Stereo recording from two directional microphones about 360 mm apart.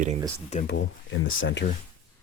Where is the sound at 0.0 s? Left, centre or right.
Centre.